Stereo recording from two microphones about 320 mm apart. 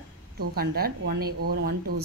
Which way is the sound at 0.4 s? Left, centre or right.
Right.